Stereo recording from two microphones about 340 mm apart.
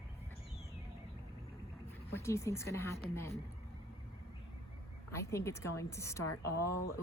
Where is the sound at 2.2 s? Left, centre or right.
Centre.